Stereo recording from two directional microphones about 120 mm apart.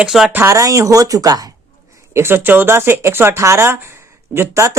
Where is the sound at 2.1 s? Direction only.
20° right (ahead or behind).